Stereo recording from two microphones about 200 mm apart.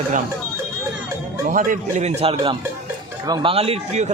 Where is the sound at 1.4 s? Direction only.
45° right (ahead or behind).